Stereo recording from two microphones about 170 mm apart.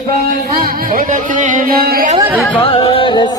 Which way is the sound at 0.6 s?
55° right (ahead or behind).